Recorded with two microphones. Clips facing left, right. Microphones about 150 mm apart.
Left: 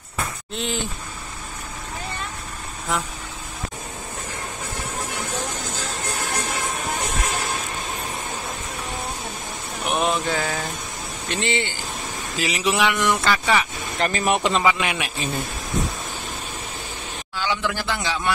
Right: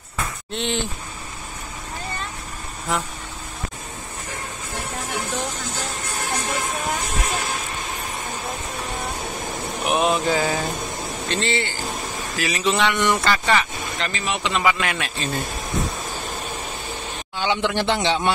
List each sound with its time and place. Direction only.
0.6 s speech: centre (ahead or behind)
9.8 s a sound: centre (ahead or behind)
11.2 s a sound: 15° left (ahead or behind)
12.4 s speech: 15° left (ahead or behind)
13.9 s speech: 45° left (ahead or behind)
14.6 s speech: 15° left (ahead or behind)
17.4 s a man's voice: 20° right (ahead or behind)